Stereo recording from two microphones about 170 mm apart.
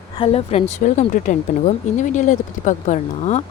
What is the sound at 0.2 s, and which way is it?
Speech, 35° left (ahead or behind).